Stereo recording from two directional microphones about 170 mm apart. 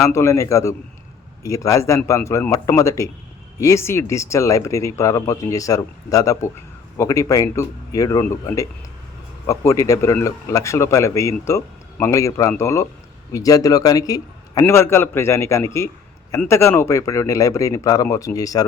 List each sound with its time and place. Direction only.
0.0 s a man's voice: 15° left (ahead or behind)